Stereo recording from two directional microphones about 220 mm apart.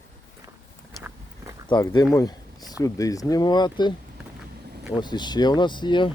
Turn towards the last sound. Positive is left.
turn(degrees=20)  # may be behind; listen again after turning